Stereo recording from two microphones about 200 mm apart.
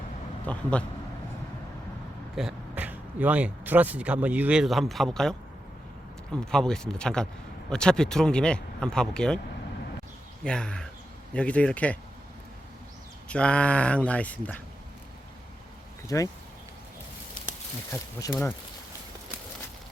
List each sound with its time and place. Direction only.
0.4 s speech: 5° left (ahead or behind)
2.3 s speech: 5° right (ahead or behind)
6.4 s speech: 5° left (ahead or behind)
10.4 s speech: 5° left (ahead or behind)
13.2 s speech: 5° left (ahead or behind)
16.0 s speech: 15° left (ahead or behind)
17.9 s speech: 15° left (ahead or behind)